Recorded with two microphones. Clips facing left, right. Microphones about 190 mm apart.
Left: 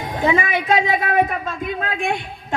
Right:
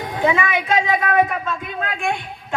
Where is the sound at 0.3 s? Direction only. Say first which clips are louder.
Left 1 dB; 40° left (ahead or behind).